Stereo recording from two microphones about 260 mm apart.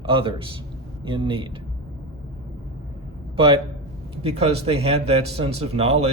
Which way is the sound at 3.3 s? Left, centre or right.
Centre.